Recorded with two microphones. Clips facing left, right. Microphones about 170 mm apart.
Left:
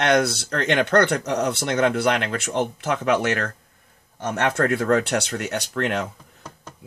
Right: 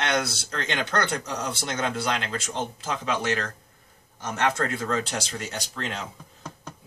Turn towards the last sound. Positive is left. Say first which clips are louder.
# left 9 dB
turn(degrees=65)  # may be behind; listen again after turning